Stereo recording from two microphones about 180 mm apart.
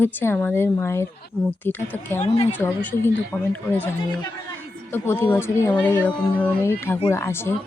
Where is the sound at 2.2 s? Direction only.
35° left (ahead or behind).